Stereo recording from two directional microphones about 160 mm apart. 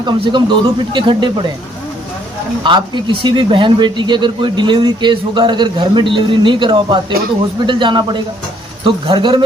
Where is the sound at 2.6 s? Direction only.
30° right (ahead or behind).